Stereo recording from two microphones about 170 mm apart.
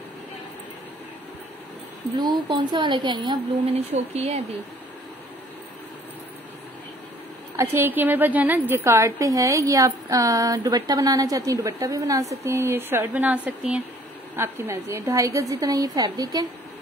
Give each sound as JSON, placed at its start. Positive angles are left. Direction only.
{"t": 2.1, "sound": "a woman's voice", "side_deg": -25}
{"t": 7.7, "sound": "a woman's voice", "side_deg": -10}